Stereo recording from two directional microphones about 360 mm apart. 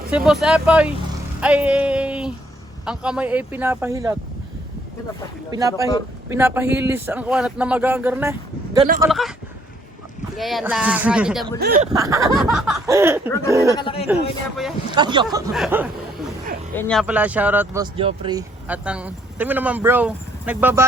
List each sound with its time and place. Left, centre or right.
0.3 s speech: centre
5.5 s speech: centre
10.3 s speech: centre
11.6 s speech: right
11.9 s speech: centre
13.7 s speech: centre
14.1 s speech: centre
14.9 s speech: centre